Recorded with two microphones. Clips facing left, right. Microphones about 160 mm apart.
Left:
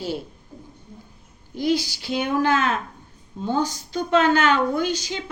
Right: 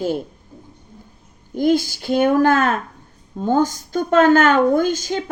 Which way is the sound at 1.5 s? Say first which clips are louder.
Right 5 dB; 50° right (ahead or behind).